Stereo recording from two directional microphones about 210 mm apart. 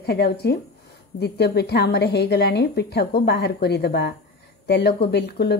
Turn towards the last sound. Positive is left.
turn(degrees=50)  # may be behind; listen again after turning